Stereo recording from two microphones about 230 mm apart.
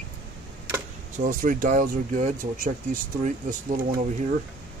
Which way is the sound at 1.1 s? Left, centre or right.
Right.